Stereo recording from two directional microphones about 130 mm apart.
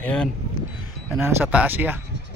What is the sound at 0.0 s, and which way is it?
Speech, 5° left (ahead or behind).